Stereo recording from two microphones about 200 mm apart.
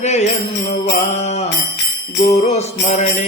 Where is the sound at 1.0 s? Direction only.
35° left (ahead or behind).